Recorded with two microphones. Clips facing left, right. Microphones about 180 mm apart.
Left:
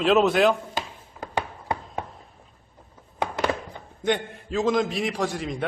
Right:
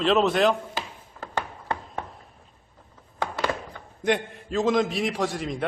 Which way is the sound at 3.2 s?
15° left (ahead or behind).